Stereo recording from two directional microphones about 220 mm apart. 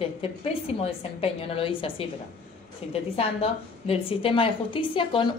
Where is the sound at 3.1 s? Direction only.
25° left (ahead or behind).